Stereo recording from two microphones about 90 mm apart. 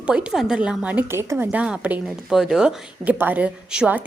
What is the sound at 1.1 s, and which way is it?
Speech, 25° right (ahead or behind).